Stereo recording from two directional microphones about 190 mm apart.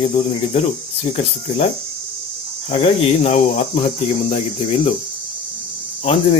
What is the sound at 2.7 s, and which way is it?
Speech, 35° left (ahead or behind).